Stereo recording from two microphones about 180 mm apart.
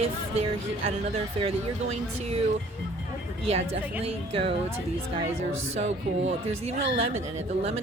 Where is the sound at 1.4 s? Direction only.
30° right (ahead or behind).